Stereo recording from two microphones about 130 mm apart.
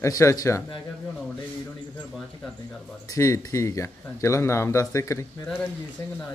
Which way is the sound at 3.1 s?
20° left (ahead or behind).